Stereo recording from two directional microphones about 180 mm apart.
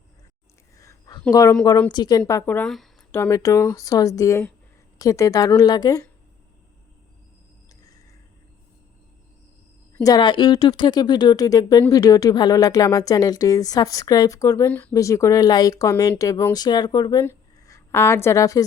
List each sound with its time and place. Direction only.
0.8 s a sound: 20° left (ahead or behind)
1.3 s a woman's voice: 20° left (ahead or behind); by 2.9 s centre (ahead or behind)
3.1 s a woman's voice: 15° left (ahead or behind)
10.0 s a woman's voice: 20° left (ahead or behind)